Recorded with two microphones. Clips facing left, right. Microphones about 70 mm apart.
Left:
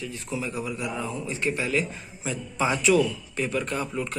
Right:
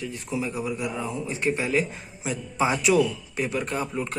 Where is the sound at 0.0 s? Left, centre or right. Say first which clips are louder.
Right 2 dB; right.